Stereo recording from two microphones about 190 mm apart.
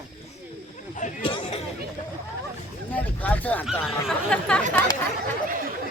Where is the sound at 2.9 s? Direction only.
10° left (ahead or behind).